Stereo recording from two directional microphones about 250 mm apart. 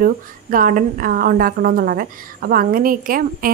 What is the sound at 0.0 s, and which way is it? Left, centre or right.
A woman's voice, right.